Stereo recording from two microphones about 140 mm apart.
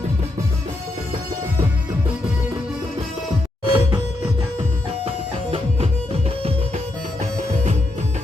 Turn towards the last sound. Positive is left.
turn(degrees=-45)  # may be behind; listen again after turning